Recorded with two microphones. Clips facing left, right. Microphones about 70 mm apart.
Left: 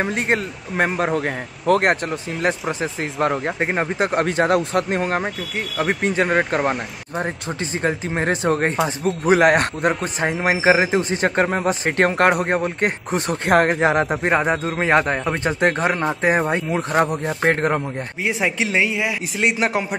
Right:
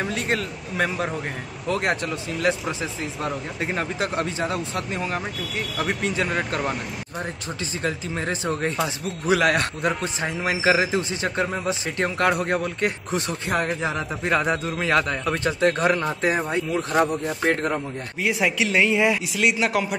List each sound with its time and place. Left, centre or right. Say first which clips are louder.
0.0 s speech: left 4 dB; left
1.1 s speech: left 7 dB; left
3.0 s speech: left 7 dB; left
3.5 s speech: left 5 dB; left
5.6 s speech: left 4 dB; left
13.5 s speech: left 9 dB; left
14.2 s a woman's voice: left 4 dB; left
18.2 s a woman's voice: left 1 dB; left
18.9 s speech: right 3 dB; centre
19.3 s speech: left 2 dB; left